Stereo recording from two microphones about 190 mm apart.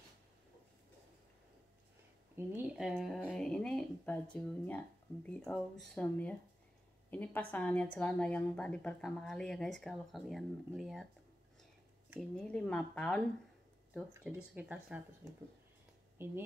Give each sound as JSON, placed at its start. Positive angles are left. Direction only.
{"t": 2.3, "sound": "speech", "side_deg": -10}
{"t": 3.0, "sound": "a woman's voice", "side_deg": 0}
{"t": 12.2, "sound": "a woman's voice", "side_deg": 5}
{"t": 14.1, "sound": "speech", "side_deg": -5}
{"t": 16.2, "sound": "speech", "side_deg": -10}